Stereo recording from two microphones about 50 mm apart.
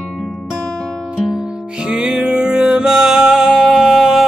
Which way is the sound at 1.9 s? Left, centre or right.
Centre.